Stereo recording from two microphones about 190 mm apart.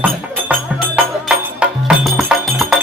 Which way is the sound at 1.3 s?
5° right (ahead or behind).